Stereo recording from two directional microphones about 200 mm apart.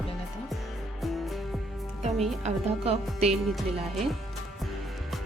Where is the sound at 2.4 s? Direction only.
30° right (ahead or behind).